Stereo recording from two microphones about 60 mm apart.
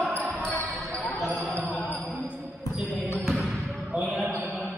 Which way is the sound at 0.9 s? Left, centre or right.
Left.